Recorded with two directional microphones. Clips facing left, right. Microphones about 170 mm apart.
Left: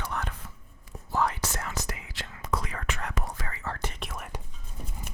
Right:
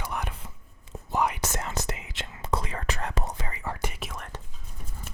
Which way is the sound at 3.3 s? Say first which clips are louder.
Right 2 dB; 20° right (ahead or behind).